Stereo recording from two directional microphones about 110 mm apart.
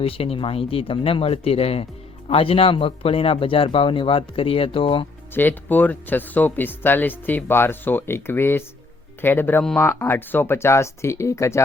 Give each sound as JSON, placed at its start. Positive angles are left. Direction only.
{"t": 0.0, "sound": "speech", "side_deg": 60}
{"t": 5.3, "sound": "speech", "side_deg": 20}